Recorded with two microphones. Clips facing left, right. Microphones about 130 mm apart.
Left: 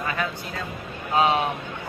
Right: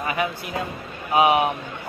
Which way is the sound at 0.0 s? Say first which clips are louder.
Right 3 dB; 15° right (ahead or behind).